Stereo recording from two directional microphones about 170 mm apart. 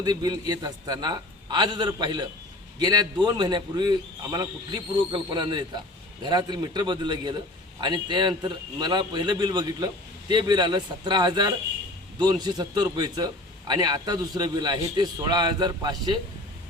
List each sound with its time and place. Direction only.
0.0 s a man's voice: 25° right (ahead or behind)